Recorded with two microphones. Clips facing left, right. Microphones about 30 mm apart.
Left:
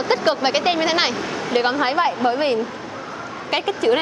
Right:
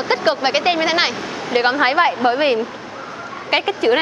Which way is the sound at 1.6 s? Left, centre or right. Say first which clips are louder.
Right 6 dB; right.